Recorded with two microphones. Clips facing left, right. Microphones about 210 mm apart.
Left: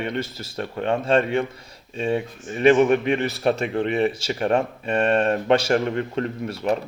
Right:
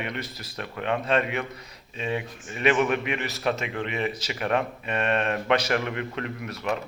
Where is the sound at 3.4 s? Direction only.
45° left (ahead or behind).